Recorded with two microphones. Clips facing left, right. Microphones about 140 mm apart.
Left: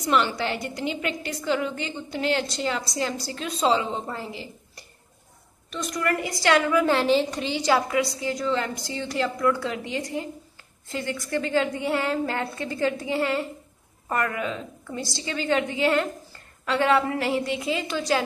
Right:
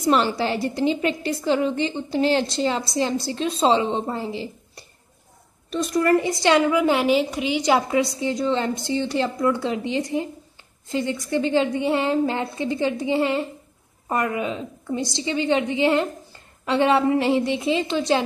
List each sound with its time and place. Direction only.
0.0 s a woman's voice: 35° right (ahead or behind)